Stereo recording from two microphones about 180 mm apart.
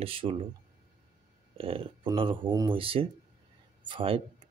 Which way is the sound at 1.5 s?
30° right (ahead or behind).